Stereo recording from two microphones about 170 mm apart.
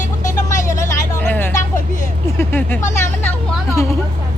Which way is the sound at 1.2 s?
10° left (ahead or behind).